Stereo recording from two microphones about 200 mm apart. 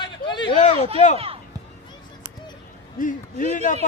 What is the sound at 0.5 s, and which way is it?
Speech, 35° left (ahead or behind).